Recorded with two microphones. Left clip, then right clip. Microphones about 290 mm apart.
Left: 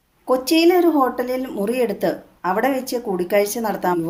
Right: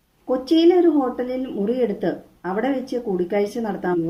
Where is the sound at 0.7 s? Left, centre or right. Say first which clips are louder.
Left 1 dB; left.